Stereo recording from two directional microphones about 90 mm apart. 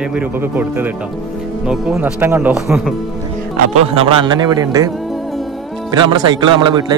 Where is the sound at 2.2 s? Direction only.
25° right (ahead or behind).